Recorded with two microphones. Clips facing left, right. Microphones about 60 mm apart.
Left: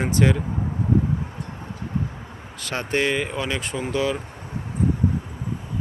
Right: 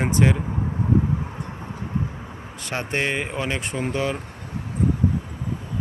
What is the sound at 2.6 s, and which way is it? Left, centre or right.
Speech, right.